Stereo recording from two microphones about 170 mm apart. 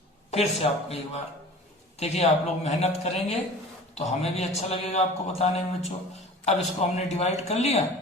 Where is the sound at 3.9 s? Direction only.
40° left (ahead or behind).